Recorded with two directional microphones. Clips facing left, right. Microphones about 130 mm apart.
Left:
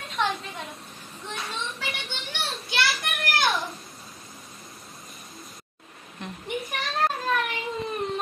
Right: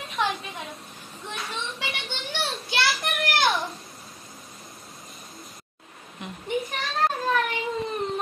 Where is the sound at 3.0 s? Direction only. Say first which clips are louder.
Right 2 dB; 25° right (ahead or behind).